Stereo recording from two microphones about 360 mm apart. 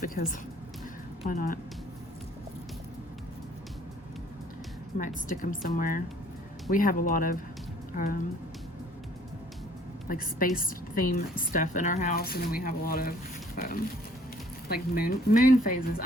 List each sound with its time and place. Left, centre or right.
0.0 s a woman's voice: left
4.9 s a woman's voice: left
10.1 s a woman's voice: left